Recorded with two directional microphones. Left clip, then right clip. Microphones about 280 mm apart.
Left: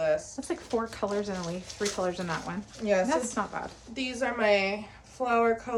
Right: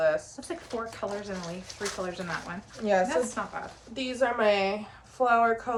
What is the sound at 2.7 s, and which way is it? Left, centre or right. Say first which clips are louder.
A woman's voice: right 1 dB; centre.